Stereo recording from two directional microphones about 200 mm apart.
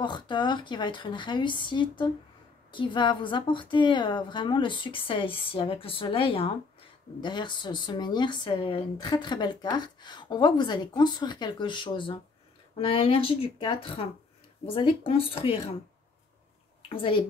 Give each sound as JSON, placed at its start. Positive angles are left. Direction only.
{"t": 0.0, "sound": "speech", "side_deg": 20}
{"t": 16.9, "sound": "speech", "side_deg": 25}